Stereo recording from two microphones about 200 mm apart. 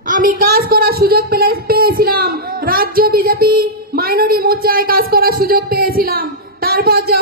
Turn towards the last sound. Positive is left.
turn(degrees=-50)  # may be behind; listen again after turning